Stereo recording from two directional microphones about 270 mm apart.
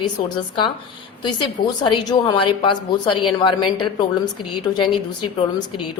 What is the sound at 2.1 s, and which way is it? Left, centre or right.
A woman's voice, centre.